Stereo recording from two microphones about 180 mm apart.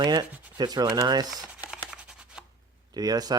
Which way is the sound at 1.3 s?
5° right (ahead or behind).